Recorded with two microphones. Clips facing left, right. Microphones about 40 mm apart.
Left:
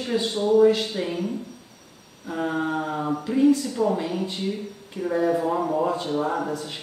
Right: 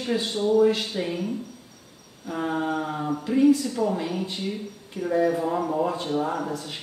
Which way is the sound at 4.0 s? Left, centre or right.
Centre.